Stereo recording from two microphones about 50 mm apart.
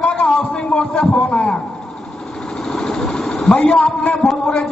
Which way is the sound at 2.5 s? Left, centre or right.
Centre.